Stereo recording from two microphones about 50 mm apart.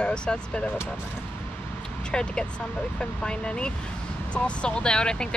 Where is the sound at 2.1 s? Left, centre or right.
Centre.